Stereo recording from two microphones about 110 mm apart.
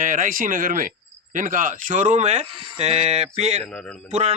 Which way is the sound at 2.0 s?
90° right.